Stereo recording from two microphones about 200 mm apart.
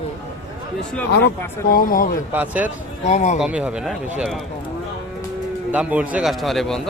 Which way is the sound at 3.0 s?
35° left (ahead or behind).